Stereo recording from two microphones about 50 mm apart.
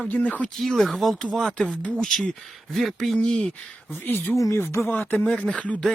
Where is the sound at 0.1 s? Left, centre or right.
Left.